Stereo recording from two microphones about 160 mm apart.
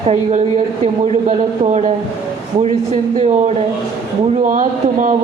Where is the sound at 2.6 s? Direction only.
45° right (ahead or behind).